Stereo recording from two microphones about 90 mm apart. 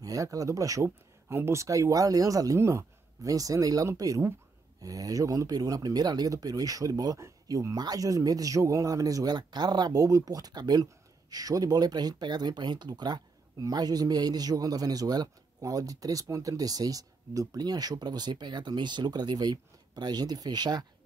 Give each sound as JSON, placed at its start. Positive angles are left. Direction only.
{"t": 0.0, "sound": "speech", "side_deg": -40}